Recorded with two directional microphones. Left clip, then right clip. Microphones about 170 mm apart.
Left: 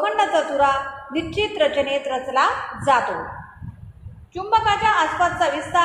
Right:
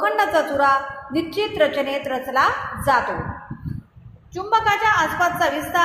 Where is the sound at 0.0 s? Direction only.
30° right (ahead or behind).